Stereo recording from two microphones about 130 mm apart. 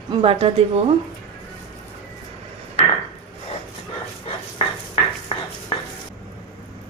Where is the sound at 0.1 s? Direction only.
45° right (ahead or behind).